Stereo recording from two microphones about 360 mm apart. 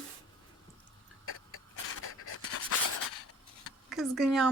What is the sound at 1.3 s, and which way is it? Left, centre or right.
Writing, left.